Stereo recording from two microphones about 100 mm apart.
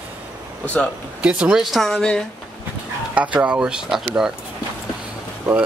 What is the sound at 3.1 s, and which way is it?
Speech, 15° right (ahead or behind).